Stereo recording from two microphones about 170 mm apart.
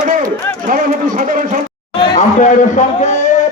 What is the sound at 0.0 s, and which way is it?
Run, 50° right (ahead or behind).